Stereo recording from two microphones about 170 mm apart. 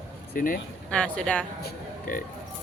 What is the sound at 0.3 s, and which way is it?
Speech, 55° left (ahead or behind).